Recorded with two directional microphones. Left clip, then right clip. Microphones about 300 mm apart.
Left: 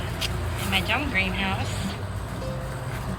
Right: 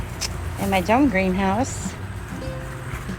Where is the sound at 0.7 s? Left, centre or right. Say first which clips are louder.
Right 6 dB; centre.